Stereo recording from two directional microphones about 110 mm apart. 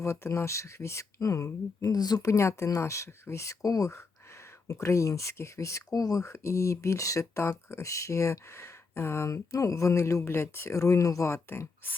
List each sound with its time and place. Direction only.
0.0 s speech: 25° left (ahead or behind)